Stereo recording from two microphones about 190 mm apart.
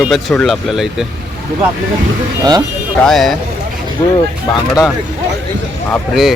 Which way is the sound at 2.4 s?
20° right (ahead or behind).